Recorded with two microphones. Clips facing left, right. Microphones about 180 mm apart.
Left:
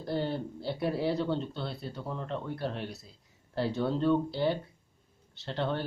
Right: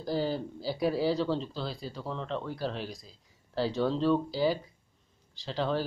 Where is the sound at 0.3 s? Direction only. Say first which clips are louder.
Right 1 dB; 90° right.